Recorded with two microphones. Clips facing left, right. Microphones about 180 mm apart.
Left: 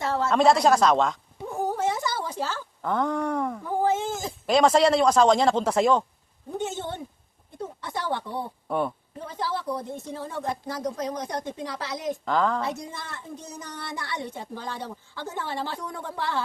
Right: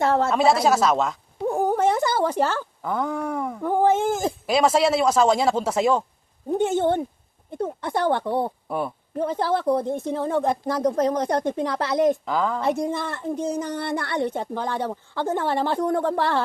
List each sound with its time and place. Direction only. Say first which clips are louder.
0.0 s a sound: right 6 dB; 55° right (ahead or behind)
0.3 s speech: even; 5° right (ahead or behind)
1.5 s a sound: right 6 dB; 55° right (ahead or behind)
2.8 s speech: left 1 dB; 5° right (ahead or behind)
3.6 s speech: right 9 dB; 55° right (ahead or behind)
4.4 s speech: left 1 dB; 5° right (ahead or behind)
6.6 s speech: right 10 dB; 55° right (ahead or behind)
12.2 s speech: even; 5° right (ahead or behind)
12.6 s speech: right 9 dB; 55° right (ahead or behind)